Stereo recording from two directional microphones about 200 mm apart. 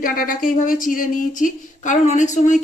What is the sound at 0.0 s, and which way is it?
A woman's voice, 45° left (ahead or behind).